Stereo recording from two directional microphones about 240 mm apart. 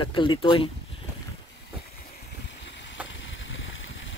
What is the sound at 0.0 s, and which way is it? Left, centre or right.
Speech, left.